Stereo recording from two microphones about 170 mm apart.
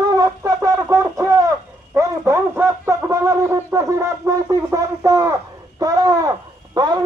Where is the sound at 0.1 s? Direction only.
20° right (ahead or behind).